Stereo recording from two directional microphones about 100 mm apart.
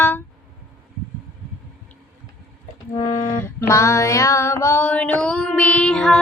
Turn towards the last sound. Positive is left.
turn(degrees=10)  # may be behind; listen again after turning